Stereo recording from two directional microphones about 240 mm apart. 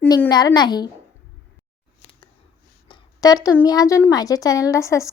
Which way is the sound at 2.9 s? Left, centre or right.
Centre.